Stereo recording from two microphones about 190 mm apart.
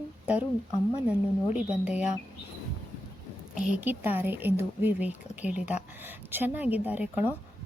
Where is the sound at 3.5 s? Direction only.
5° right (ahead or behind).